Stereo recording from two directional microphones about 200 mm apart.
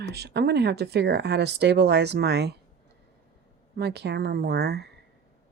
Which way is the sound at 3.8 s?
55° right (ahead or behind).